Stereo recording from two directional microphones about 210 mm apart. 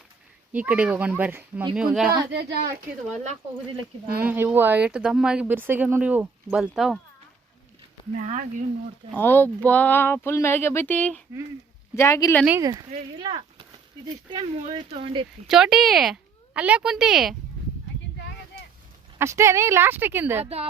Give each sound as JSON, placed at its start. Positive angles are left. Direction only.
{"t": 0.5, "sound": "a woman's voice", "side_deg": -5}
{"t": 4.2, "sound": "speech", "side_deg": -10}
{"t": 8.1, "sound": "speech", "side_deg": -35}
{"t": 9.1, "sound": "speech", "side_deg": 10}
{"t": 12.5, "sound": "speech", "side_deg": -15}
{"t": 14.3, "sound": "speech", "side_deg": -25}
{"t": 15.4, "sound": "a woman's voice", "side_deg": 0}
{"t": 19.2, "sound": "speech", "side_deg": -15}
{"t": 20.4, "sound": "speech", "side_deg": -30}